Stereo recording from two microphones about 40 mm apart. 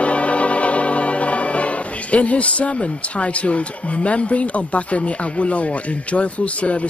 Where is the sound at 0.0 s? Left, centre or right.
Left.